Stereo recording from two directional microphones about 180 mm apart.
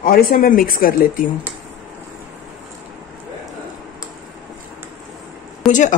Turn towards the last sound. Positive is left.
turn(degrees=0)  # may be behind; listen again after turning